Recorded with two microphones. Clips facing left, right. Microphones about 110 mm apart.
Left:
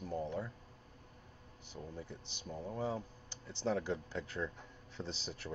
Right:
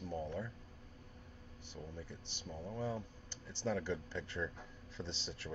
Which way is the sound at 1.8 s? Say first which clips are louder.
Left 2 dB; 30° left (ahead or behind).